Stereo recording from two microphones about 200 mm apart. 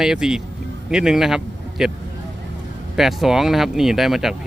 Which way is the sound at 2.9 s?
Centre (ahead or behind).